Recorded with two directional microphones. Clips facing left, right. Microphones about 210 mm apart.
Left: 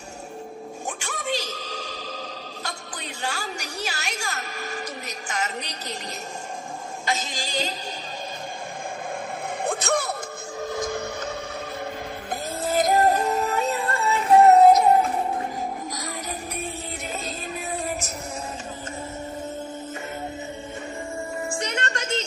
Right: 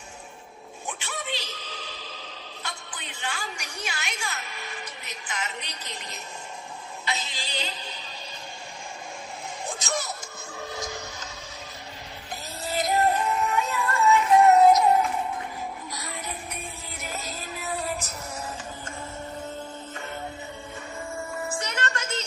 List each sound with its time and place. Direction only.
0.9 s music: 45° left (ahead or behind)
5.0 s a sound: 45° left (ahead or behind)
7.0 s speech: 45° left (ahead or behind)
9.6 s music: 60° left (ahead or behind)
10.7 s a sound: 55° left (ahead or behind)
12.3 s music: 50° left (ahead or behind)
17.2 s music: 25° left (ahead or behind)
21.5 s music: 20° left (ahead or behind)